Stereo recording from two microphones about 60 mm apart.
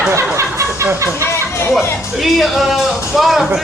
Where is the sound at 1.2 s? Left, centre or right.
Left.